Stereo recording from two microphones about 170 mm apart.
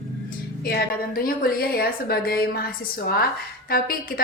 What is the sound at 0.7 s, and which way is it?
A woman's voice, 60° left (ahead or behind).